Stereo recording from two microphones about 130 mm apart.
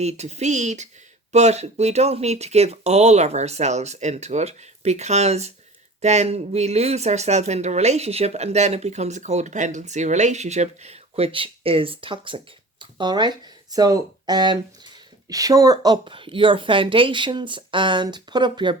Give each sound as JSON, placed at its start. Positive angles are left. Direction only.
{"t": 0.0, "sound": "speech", "side_deg": -60}